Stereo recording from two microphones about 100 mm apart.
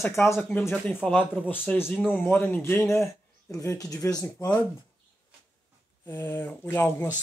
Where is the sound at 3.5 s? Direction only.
30° left (ahead or behind).